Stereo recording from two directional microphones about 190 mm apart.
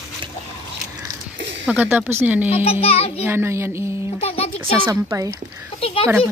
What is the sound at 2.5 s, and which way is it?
Speech, 30° left (ahead or behind).